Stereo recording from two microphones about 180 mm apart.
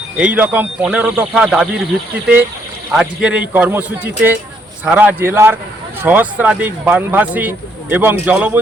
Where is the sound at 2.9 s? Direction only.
5° right (ahead or behind).